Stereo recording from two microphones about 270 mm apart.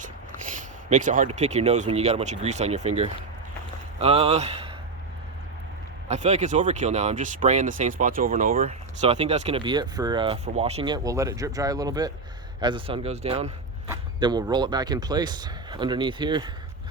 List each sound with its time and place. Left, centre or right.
0.9 s speech: right
6.1 s speech: right